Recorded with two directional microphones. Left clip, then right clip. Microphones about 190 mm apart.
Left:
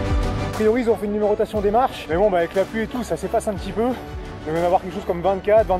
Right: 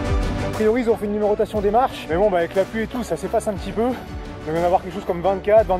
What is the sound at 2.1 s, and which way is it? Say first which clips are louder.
Speech: even; 25° right (ahead or behind).